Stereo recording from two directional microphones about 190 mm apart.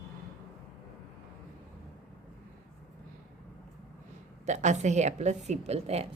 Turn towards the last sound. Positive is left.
turn(degrees=-35)  # may be behind; listen again after turning